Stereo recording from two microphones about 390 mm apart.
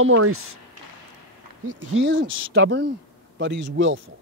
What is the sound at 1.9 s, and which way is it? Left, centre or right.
A man's voice, right.